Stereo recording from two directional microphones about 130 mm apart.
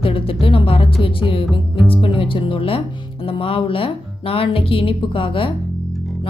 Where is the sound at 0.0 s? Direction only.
45° left (ahead or behind).